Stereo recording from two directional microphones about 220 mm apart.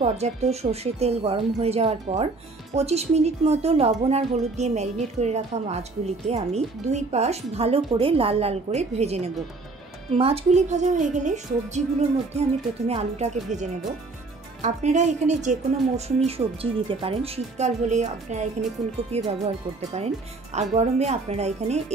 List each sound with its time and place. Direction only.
0.0 s a woman's voice: 30° right (ahead or behind)
14.6 s a woman's voice: 30° right (ahead or behind)